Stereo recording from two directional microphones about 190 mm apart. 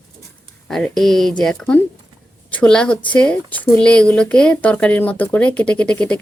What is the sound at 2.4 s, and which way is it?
Speech, 5° left (ahead or behind).